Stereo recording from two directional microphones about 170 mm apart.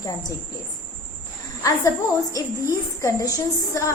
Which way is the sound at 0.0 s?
20° left (ahead or behind).